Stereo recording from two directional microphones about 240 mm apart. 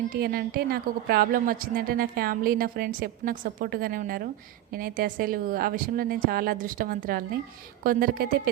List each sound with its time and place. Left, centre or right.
0.1 s a woman's voice: right